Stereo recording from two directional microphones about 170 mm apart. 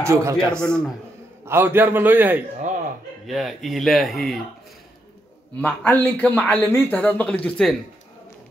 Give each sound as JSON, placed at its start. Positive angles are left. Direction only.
{"t": 0.0, "sound": "a man's voice", "side_deg": -15}
{"t": 0.5, "sound": "speech", "side_deg": 5}
{"t": 1.4, "sound": "a man's voice", "side_deg": -15}
{"t": 5.6, "sound": "a man's voice", "side_deg": 10}